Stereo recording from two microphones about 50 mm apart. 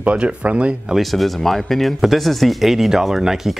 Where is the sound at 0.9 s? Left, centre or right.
Centre.